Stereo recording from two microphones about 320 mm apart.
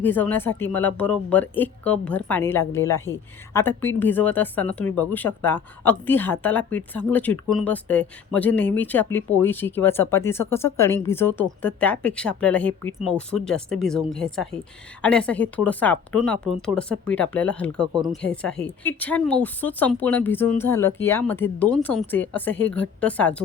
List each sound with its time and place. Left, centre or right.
0.0 s speech: centre